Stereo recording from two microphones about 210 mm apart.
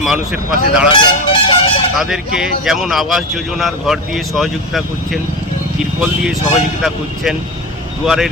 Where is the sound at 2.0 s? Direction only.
5° right (ahead or behind).